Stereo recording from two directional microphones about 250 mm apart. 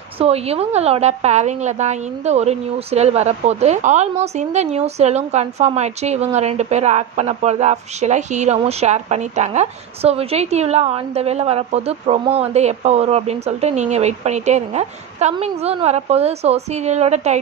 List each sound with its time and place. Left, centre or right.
0.2 s a woman's voice: right